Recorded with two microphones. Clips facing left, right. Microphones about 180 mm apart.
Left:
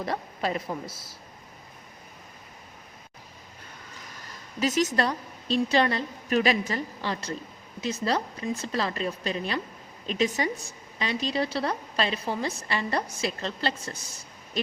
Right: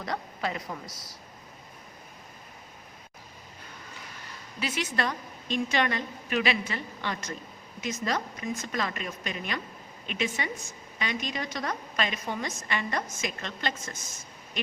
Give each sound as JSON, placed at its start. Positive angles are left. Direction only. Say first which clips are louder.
{"t": 0.0, "sound": "a woman's voice", "louder": "left 3 dB", "side_deg": 25}
{"t": 4.6, "sound": "speech", "louder": "left 6 dB", "side_deg": 40}